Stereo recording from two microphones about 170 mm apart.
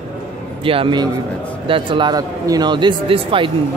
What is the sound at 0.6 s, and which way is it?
Speech, 30° right (ahead or behind).